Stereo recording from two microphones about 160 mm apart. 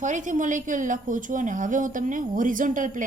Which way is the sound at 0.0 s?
50° right (ahead or behind).